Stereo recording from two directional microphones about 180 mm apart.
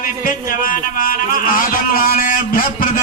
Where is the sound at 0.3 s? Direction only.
50° left (ahead or behind).